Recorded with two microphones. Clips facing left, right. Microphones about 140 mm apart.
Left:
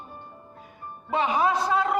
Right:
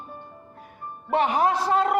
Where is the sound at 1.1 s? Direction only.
60° right (ahead or behind).